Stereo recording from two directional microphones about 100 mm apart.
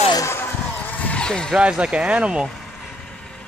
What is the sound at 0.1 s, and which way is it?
Vehicle, 30° left (ahead or behind).